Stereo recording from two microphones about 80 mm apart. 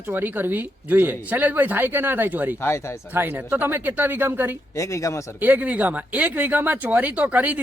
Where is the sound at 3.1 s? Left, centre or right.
Right.